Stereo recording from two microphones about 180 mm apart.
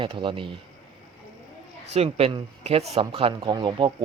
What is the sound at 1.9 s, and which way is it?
Speech, 35° right (ahead or behind).